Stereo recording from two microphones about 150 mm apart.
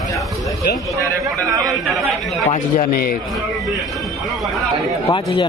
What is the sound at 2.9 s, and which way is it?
Speech, 85° left.